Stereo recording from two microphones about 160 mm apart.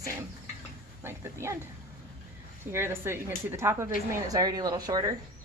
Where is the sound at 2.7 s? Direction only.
15° right (ahead or behind).